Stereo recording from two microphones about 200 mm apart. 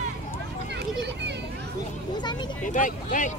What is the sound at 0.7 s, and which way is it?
Children playing, 55° right (ahead or behind).